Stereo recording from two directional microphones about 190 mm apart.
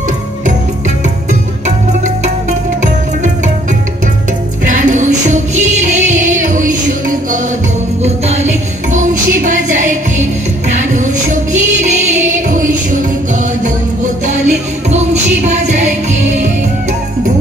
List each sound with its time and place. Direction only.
4.6 s music: 40° right (ahead or behind)
11.9 s music: 40° right (ahead or behind)
14.9 s music: 35° right (ahead or behind)